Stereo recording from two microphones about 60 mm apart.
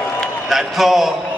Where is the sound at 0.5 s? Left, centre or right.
Centre.